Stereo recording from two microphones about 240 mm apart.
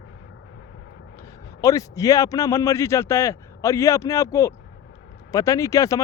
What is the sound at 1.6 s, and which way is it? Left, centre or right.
Speech, centre.